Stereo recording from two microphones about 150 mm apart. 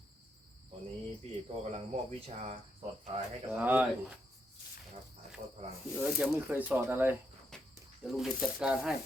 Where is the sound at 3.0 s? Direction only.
45° right (ahead or behind).